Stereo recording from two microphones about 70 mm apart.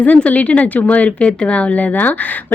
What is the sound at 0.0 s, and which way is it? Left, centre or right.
A woman's voice, left.